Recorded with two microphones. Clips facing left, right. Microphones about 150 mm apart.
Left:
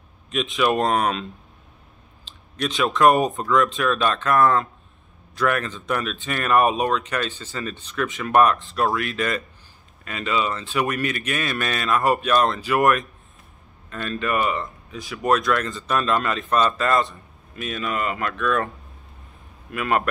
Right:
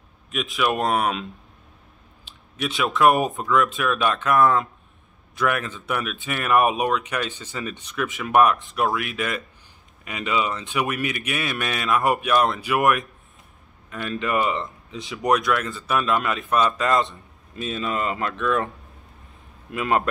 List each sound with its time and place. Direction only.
0.3 s speech: 5° right (ahead or behind)
2.2 s a man's voice: 10° right (ahead or behind)
19.7 s speech: 20° right (ahead or behind)